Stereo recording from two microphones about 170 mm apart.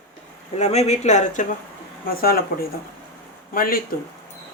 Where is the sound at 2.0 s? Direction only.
60° left (ahead or behind).